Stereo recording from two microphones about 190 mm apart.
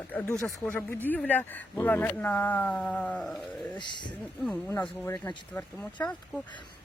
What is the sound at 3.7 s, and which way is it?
Speech, 25° left (ahead or behind).